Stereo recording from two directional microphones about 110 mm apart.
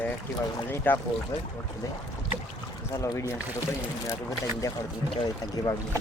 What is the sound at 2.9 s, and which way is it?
Speech, 25° left (ahead or behind).